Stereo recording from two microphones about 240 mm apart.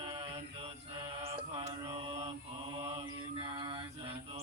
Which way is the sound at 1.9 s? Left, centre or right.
Right.